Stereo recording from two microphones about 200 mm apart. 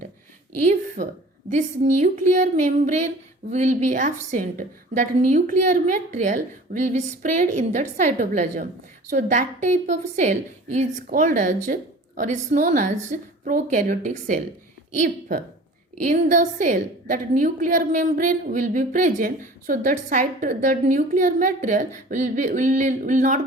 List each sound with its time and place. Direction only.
1.5 s a woman's voice: 35° right (ahead or behind)